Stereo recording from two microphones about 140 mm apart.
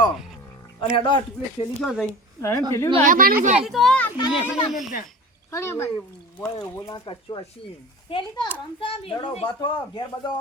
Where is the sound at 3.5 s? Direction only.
Centre (ahead or behind).